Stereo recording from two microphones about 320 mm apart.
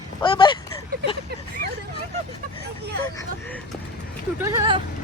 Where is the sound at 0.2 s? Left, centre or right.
Centre.